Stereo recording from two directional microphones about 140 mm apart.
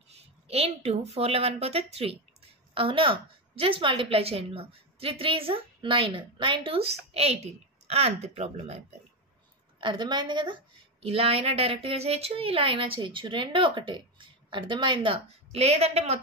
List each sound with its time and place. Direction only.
0.1 s a woman's voice: 45° right (ahead or behind)
9.8 s a woman's voice: 35° right (ahead or behind)